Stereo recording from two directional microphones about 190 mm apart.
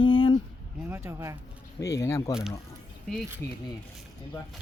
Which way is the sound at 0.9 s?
15° right (ahead or behind).